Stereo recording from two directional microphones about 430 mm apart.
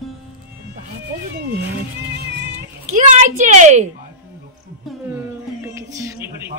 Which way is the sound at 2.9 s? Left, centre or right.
Centre.